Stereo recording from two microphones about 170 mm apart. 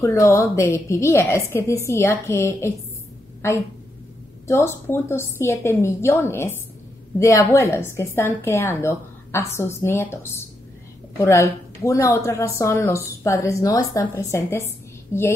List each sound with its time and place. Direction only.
0.0 s speech: 15° left (ahead or behind)